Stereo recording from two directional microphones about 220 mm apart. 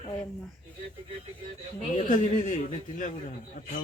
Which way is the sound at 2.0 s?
35° left (ahead or behind).